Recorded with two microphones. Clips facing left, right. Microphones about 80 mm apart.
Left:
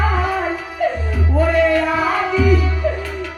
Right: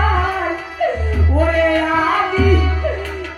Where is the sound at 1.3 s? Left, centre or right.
Right.